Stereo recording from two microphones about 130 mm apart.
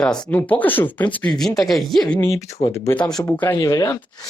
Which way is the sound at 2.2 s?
25° left (ahead or behind).